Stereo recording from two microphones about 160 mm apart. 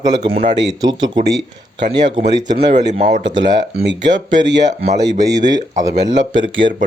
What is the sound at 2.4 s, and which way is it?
Speech, 30° right (ahead or behind).